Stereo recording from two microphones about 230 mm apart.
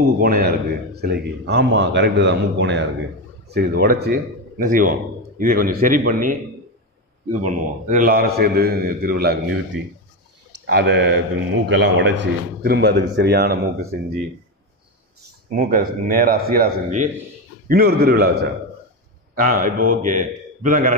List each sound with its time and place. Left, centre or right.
0.0 s a man's voice: right
7.4 s a man's voice: right
10.7 s a man's voice: right
15.5 s a man's voice: right